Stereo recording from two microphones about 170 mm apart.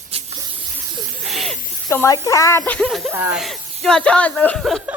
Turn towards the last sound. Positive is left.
turn(degrees=5)  # may be behind; listen again after turning